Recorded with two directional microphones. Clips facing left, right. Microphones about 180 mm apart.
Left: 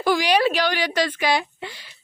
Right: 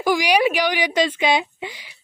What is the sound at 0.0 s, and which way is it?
A woman's voice, 15° right (ahead or behind).